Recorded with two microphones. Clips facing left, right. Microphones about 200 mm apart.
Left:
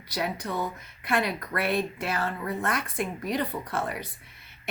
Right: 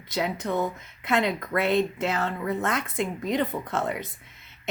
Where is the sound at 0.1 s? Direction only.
20° right (ahead or behind).